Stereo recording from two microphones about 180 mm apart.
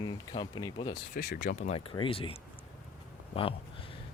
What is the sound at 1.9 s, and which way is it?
Speech, 30° left (ahead or behind).